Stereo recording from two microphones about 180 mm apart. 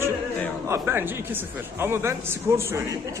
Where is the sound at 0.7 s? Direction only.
15° right (ahead or behind).